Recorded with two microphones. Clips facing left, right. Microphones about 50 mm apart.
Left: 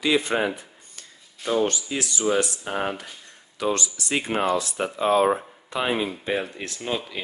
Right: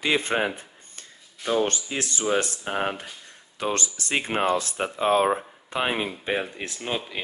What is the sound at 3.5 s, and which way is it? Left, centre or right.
Speech, right.